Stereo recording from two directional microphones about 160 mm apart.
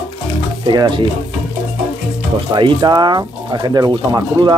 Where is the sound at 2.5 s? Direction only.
30° right (ahead or behind).